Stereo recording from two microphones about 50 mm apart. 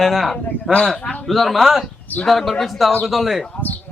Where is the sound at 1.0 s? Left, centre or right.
Left.